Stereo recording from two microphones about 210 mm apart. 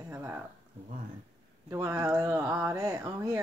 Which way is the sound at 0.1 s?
10° right (ahead or behind).